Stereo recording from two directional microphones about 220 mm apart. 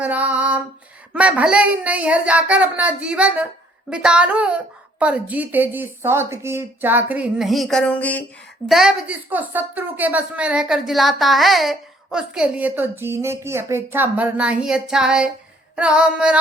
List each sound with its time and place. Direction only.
0.0 s female singing: 5° right (ahead or behind)
1.1 s a woman's voice: 5° right (ahead or behind)